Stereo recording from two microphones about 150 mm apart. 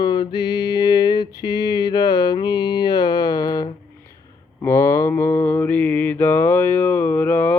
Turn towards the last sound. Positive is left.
turn(degrees=10)  # may be behind; listen again after turning